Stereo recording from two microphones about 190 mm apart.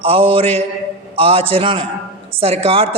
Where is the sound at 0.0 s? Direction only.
30° right (ahead or behind).